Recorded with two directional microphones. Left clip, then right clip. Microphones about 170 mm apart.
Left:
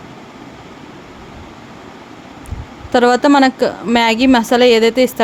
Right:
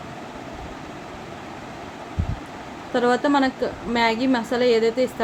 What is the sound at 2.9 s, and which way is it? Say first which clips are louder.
A woman's voice: left 9 dB; 90° left.